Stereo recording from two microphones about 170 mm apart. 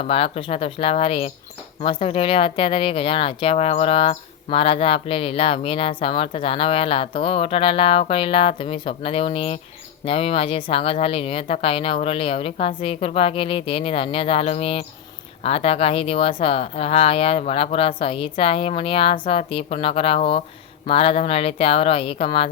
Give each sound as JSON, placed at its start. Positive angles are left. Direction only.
{"t": 0.0, "sound": "speech", "side_deg": 35}